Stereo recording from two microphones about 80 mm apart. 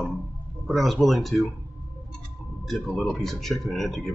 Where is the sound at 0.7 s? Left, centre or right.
Centre.